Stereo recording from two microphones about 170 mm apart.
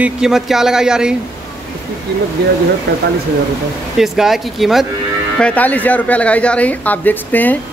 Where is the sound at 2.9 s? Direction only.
90° right.